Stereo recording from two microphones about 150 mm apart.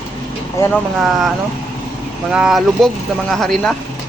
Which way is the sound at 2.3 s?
5° right (ahead or behind).